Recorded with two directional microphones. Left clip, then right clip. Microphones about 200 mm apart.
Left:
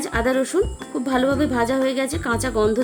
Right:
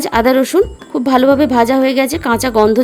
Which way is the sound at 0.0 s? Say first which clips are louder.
Right 9 dB; 45° right (ahead or behind).